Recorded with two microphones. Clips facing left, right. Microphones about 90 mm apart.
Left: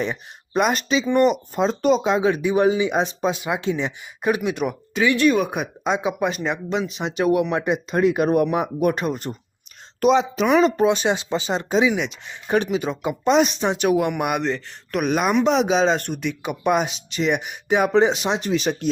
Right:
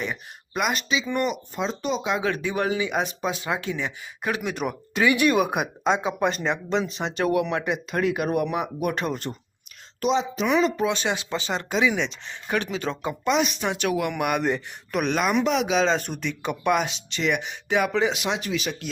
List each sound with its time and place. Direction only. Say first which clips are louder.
0.0 s speech: left 5 dB; 35° left (ahead or behind)
2.1 s speech: left 6 dB; 20° left (ahead or behind)
4.4 s speech: left 4 dB; centre (ahead or behind)
7.5 s speech: left 4 dB; 25° left (ahead or behind)
9.0 s speech: left 3 dB; 15° left (ahead or behind)
10.0 s speech: left 6 dB; 60° left (ahead or behind)
10.8 s speech: left 6 dB; 20° left (ahead or behind)
11.9 s speech: left 3 dB; 5° left (ahead or behind)
13.2 s speech: left 5 dB; 35° left (ahead or behind)
14.9 s speech: left 3 dB; 5° left (ahead or behind)
15.4 s speech: left 4 dB; 30° left (ahead or behind)
16.0 s speech: left 3 dB; centre (ahead or behind)
16.6 s speech: left 3 dB; 20° left (ahead or behind); by 18.9 s 35° left (ahead or behind)